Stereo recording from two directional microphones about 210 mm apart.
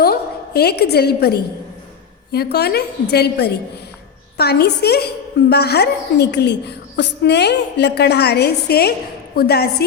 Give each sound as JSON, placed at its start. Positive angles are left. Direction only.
{"t": 0.0, "sound": "a woman's voice", "side_deg": 50}